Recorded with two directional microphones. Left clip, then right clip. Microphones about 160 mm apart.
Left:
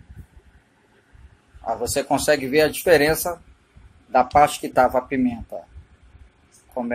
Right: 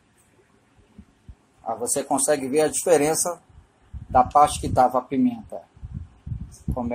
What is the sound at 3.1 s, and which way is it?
Speech, 40° left (ahead or behind).